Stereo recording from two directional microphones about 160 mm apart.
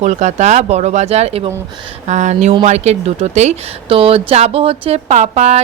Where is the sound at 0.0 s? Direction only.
45° right (ahead or behind).